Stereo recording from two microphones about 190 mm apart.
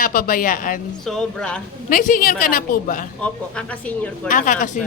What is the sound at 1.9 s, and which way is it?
Speech, 45° left (ahead or behind).